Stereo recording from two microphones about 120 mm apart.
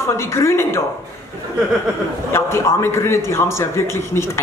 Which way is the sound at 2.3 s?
20° left (ahead or behind).